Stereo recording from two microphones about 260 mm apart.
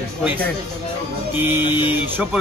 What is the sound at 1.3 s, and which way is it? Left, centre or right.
Speech, centre.